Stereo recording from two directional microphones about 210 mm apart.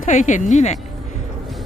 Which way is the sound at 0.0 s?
35° left (ahead or behind).